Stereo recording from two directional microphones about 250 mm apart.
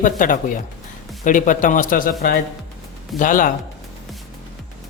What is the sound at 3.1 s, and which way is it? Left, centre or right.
Speech, left.